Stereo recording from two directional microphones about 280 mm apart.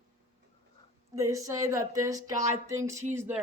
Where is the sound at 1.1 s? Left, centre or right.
Centre.